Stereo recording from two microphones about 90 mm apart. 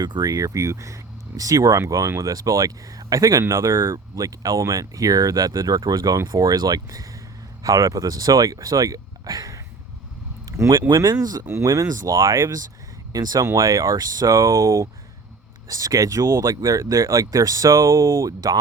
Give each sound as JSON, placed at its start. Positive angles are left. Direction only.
{"t": 0.0, "sound": "speech", "side_deg": -50}
{"t": 10.4, "sound": "a sound", "side_deg": -40}
{"t": 10.8, "sound": "speech", "side_deg": -50}